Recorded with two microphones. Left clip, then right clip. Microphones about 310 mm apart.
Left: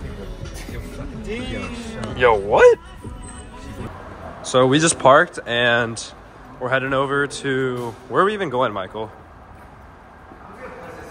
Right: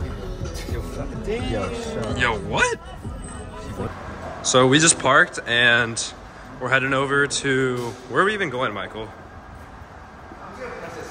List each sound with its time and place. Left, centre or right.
1.2 s speech: right
2.1 s speech: centre
4.5 s speech: centre